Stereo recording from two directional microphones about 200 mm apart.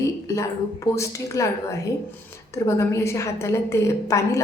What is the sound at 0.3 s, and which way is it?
A woman's voice, 15° left (ahead or behind).